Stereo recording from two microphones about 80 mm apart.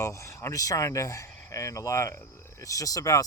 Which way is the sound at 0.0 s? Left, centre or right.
Left.